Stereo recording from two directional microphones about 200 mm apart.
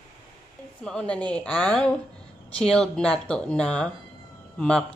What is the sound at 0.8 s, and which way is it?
A woman's voice, 5° left (ahead or behind).